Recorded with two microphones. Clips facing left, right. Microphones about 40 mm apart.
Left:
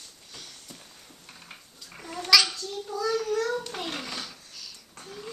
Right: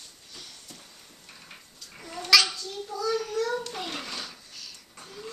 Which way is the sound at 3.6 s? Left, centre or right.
Centre.